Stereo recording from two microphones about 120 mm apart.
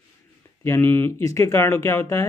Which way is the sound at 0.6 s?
20° left (ahead or behind).